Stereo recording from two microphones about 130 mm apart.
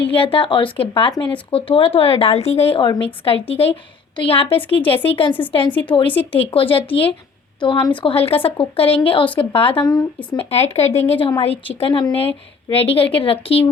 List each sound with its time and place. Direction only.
0.1 s speech: 45° left (ahead or behind)
9.8 s speech: 30° left (ahead or behind)
10.3 s speech: 55° left (ahead or behind)